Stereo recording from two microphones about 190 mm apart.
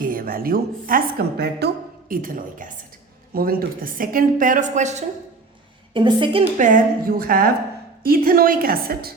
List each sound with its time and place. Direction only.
0.0 s a woman's voice: 50° right (ahead or behind)
5.9 s a woman's voice: 25° right (ahead or behind)
6.6 s a woman's voice: 45° right (ahead or behind)